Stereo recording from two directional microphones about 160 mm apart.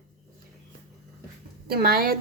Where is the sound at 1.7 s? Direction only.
70° right (ahead or behind).